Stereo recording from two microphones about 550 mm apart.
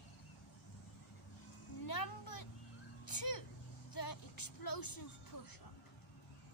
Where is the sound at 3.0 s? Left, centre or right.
Left.